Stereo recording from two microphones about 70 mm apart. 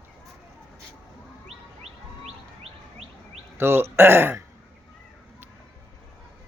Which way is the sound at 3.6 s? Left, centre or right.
Right.